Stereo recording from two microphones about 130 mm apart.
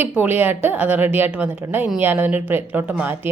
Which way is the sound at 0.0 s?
15° right (ahead or behind).